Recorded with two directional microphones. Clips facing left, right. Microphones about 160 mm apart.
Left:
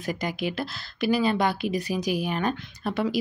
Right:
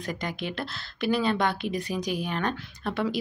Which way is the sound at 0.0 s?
5° left (ahead or behind).